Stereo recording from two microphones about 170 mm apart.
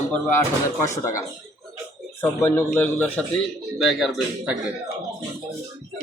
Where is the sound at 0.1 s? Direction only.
15° left (ahead or behind).